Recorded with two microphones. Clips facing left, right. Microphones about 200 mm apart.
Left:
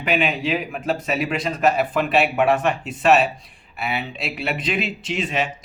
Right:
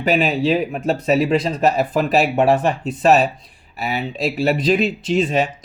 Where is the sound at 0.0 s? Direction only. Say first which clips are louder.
Right 5 dB; 35° right (ahead or behind).